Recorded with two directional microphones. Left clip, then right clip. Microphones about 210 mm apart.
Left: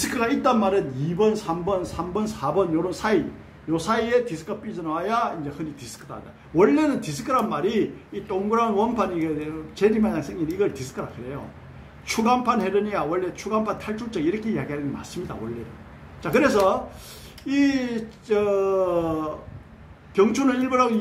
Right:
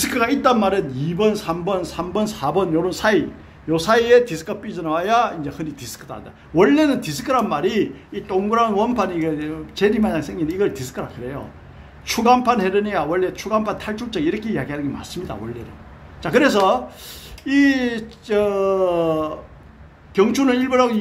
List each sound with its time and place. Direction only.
0.0 s a man's voice: 35° right (ahead or behind)
12.1 s a man's voice: 35° right (ahead or behind)